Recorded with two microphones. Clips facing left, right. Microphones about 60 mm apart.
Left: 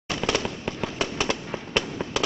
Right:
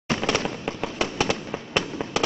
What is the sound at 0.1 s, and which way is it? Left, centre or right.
Fireworks, right.